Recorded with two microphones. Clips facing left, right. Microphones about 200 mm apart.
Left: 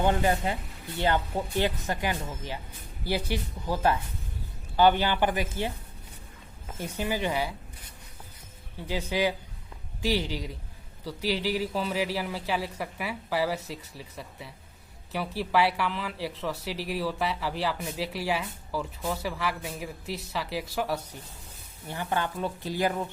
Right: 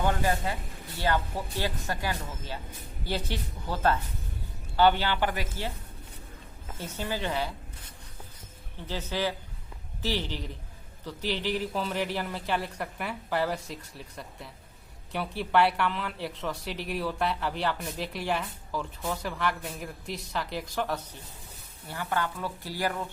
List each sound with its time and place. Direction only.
0.0 s speech: 20° left (ahead or behind)
6.7 s speech: 10° left (ahead or behind)
8.9 s speech: 10° left (ahead or behind)
21.8 s speech: 20° left (ahead or behind)